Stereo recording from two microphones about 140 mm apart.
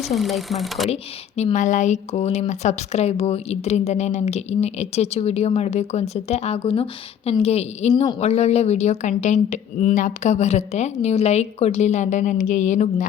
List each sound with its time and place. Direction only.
0.0 s speech: centre (ahead or behind)
1.5 s a woman's voice: 60° left (ahead or behind)